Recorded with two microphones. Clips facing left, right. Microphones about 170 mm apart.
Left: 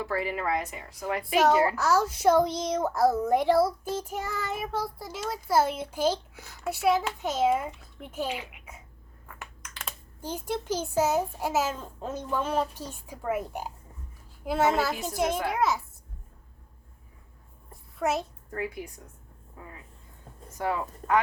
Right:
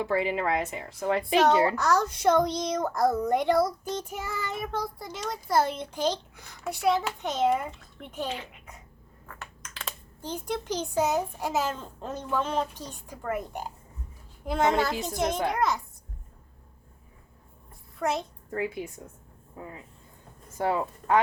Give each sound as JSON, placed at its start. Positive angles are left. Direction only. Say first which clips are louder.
{"t": 0.0, "sound": "speech", "louder": "right 3 dB", "side_deg": -20}
{"t": 1.7, "sound": "a child's voice", "louder": "even", "side_deg": 5}
{"t": 17.7, "sound": "a sound", "louder": "left 1 dB", "side_deg": 5}
{"t": 18.5, "sound": "speech", "louder": "right 3 dB", "side_deg": -25}